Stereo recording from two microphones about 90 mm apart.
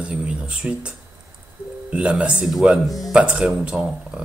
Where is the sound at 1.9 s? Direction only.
10° right (ahead or behind).